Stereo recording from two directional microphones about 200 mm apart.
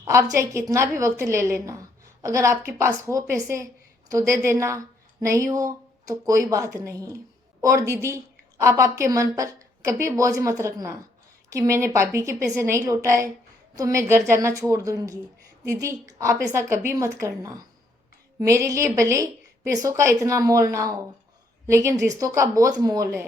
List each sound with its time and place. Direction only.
0.0 s a woman's voice: 15° right (ahead or behind)